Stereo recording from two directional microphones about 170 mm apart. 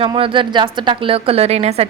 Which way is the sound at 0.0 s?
30° right (ahead or behind).